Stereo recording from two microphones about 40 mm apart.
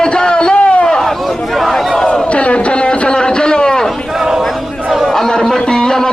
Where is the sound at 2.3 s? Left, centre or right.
Left.